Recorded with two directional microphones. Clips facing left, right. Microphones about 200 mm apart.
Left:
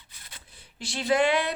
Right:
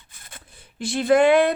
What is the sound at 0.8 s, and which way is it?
Speech, 55° right (ahead or behind).